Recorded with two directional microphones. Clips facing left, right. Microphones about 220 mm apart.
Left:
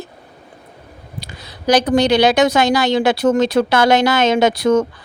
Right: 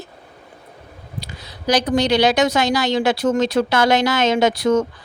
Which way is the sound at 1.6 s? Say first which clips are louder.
Left 4 dB; 50° left (ahead or behind).